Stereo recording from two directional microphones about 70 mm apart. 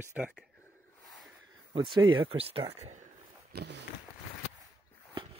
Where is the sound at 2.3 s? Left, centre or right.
Right.